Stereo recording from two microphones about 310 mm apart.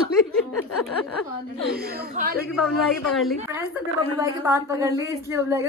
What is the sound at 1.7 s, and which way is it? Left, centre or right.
Speech, right.